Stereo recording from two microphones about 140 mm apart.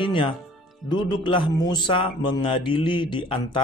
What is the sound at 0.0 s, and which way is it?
Music, 35° left (ahead or behind).